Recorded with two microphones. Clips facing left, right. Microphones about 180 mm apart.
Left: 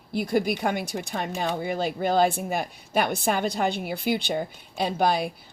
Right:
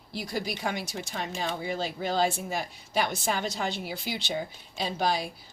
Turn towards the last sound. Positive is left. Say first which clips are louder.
# left 5 dB
turn(degrees=55)  # may be behind; listen again after turning